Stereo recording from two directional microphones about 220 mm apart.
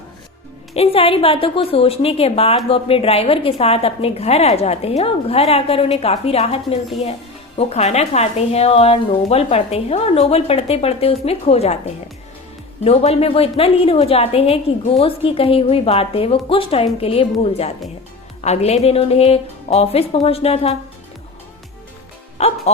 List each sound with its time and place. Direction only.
0.7 s a woman's voice: 25° left (ahead or behind)
12.8 s a woman's voice: 25° left (ahead or behind)
22.4 s a woman's voice: 30° left (ahead or behind)